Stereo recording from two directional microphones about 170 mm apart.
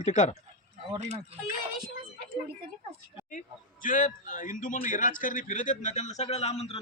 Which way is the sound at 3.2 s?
50° left (ahead or behind).